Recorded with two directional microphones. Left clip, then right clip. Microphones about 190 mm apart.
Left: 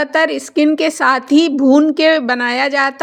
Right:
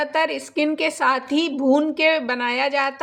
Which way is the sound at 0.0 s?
40° left (ahead or behind).